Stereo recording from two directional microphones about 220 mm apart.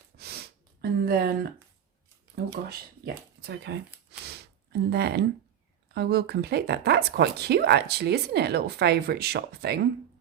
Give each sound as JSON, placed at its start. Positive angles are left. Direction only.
{"t": 0.2, "sound": "gasp", "side_deg": -45}
{"t": 2.3, "sound": "speech", "side_deg": -45}
{"t": 4.3, "sound": "a sound", "side_deg": -45}
{"t": 5.9, "sound": "speech", "side_deg": -45}